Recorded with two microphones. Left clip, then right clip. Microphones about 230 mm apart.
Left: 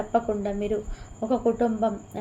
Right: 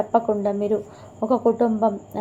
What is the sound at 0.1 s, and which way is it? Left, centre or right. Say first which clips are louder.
Speech: right 2 dB; centre.